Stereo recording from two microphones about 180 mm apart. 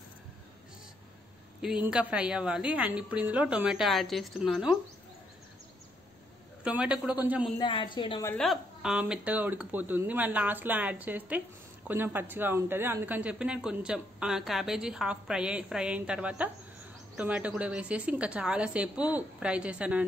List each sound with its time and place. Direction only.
1.6 s speech: 5° right (ahead or behind)
6.6 s speech: 5° right (ahead or behind)
7.5 s a woman's voice: 25° left (ahead or behind)
8.4 s speech: centre (ahead or behind)